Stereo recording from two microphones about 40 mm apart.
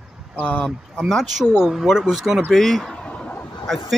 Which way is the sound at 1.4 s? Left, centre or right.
Centre.